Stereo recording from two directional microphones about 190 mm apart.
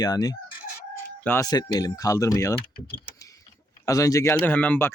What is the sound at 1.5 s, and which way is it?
Speech, 20° left (ahead or behind).